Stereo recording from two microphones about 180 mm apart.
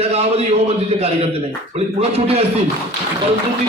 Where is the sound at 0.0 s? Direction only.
35° right (ahead or behind).